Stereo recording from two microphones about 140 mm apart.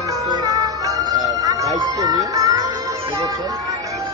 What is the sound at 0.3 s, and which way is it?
Music, 25° right (ahead or behind).